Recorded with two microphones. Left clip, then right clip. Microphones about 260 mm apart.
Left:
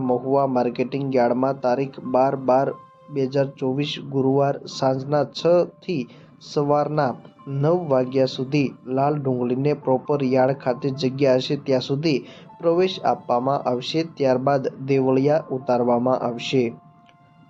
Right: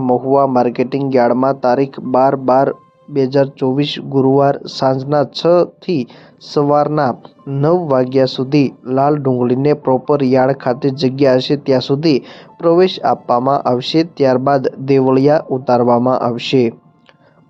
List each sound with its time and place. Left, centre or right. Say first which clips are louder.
0.0 s speech: right 8 dB; right